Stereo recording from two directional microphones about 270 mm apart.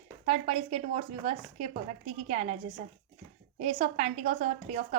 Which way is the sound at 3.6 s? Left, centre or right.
Right.